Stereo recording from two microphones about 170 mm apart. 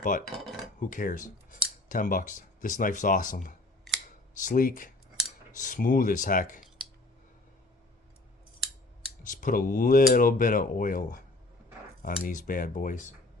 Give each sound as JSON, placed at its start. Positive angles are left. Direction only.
{"t": 0.0, "sound": "speech", "side_deg": 50}
{"t": 0.3, "sound": "cutlery", "side_deg": 0}
{"t": 0.8, "sound": "speech", "side_deg": 50}
{"t": 9.3, "sound": "speech", "side_deg": 50}